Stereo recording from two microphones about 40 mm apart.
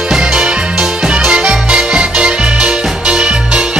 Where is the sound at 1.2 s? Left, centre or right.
Right.